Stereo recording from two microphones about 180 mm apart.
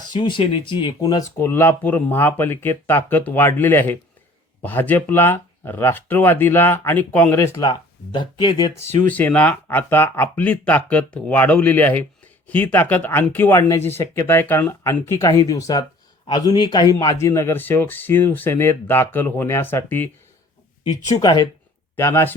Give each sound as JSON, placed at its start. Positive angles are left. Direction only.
{"t": 0.1, "sound": "speech", "side_deg": 25}
{"t": 9.0, "sound": "speech", "side_deg": 10}
{"t": 21.1, "sound": "speech", "side_deg": 25}
{"t": 21.9, "sound": "speech", "side_deg": 15}